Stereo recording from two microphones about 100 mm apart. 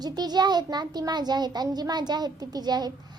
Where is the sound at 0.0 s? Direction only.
45° right (ahead or behind).